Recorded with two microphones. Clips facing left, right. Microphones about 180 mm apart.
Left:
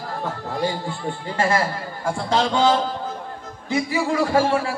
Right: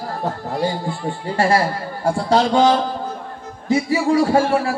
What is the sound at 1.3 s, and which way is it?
Speech, 35° right (ahead or behind).